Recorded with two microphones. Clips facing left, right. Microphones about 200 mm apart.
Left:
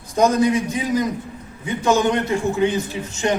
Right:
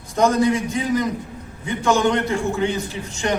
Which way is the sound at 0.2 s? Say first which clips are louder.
Left 1 dB; 20° left (ahead or behind).